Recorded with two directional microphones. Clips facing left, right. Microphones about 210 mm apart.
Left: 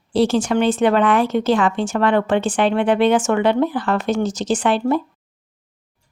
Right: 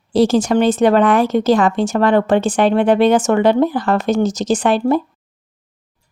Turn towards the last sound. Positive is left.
turn(degrees=-40)  # may be behind; listen again after turning